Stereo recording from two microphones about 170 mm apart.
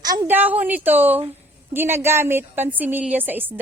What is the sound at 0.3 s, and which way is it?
A woman's voice, 10° right (ahead or behind).